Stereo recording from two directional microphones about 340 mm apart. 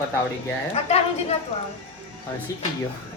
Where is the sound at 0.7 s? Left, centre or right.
Centre.